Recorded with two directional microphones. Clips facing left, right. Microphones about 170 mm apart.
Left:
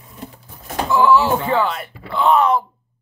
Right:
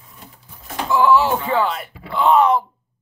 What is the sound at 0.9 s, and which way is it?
Speech, 15° right (ahead or behind).